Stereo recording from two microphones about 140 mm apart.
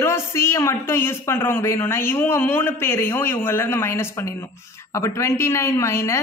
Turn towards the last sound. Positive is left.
turn(degrees=20)  # may be behind; listen again after turning